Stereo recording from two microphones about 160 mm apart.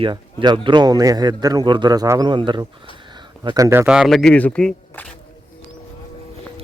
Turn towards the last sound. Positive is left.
turn(degrees=5)  # may be behind; listen again after turning